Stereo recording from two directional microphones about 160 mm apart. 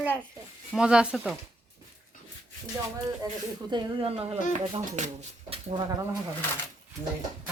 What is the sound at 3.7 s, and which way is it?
Speech, 30° right (ahead or behind).